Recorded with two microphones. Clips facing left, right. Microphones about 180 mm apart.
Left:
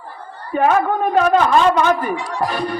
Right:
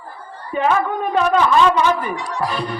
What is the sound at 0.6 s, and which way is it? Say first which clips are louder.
Speech: left 3 dB; 45° left (ahead or behind).